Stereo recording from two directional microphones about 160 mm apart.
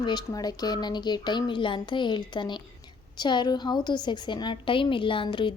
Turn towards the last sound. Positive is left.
turn(degrees=30)  # may be behind; listen again after turning